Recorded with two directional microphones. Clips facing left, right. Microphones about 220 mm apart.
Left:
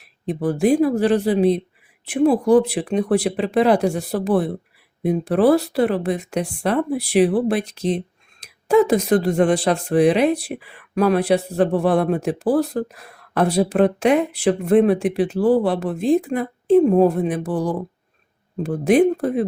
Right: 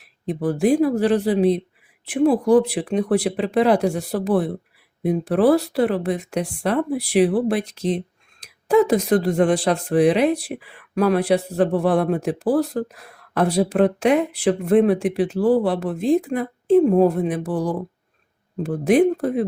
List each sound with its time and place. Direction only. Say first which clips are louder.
0.3 s speech: left 1 dB; 25° left (ahead or behind)